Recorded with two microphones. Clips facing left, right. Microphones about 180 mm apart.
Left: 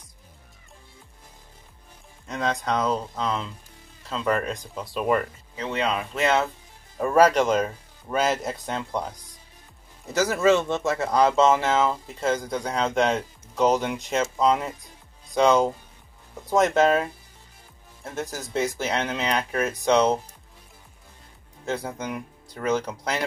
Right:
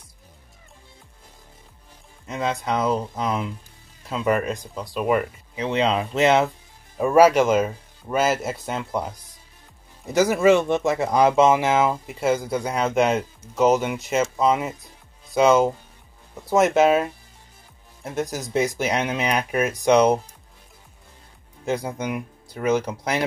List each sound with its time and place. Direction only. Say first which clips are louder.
2.2 s speech: right 1 dB; 5° right (ahead or behind)
21.6 s speech: right 4 dB; 10° right (ahead or behind)